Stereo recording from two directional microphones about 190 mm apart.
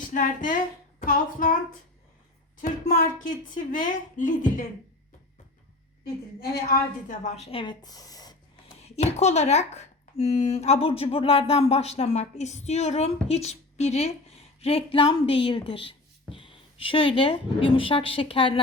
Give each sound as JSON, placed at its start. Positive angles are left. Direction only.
{"t": 0.1, "sound": "a sound", "side_deg": 45}
{"t": 2.6, "sound": "a woman's voice", "side_deg": 45}
{"t": 6.4, "sound": "a woman's voice", "side_deg": 55}
{"t": 7.3, "sound": "a woman's voice", "side_deg": 35}
{"t": 8.8, "sound": "a woman's voice", "side_deg": 35}